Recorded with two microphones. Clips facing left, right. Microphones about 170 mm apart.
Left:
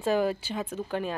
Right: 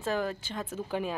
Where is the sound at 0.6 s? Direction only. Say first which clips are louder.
Even; 5° right (ahead or behind).